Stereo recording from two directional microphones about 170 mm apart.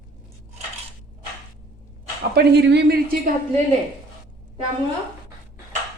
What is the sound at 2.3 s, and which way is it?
Speech, 85° right.